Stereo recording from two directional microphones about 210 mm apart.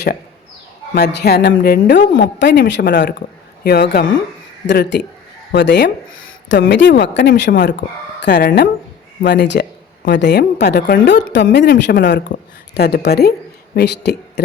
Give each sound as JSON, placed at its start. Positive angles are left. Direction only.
{"t": 0.9, "sound": "a woman's voice", "side_deg": 50}